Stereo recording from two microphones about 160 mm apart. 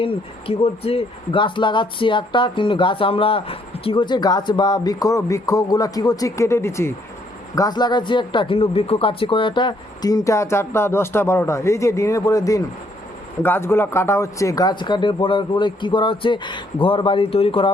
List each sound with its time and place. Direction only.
0.0 s speech: 35° left (ahead or behind)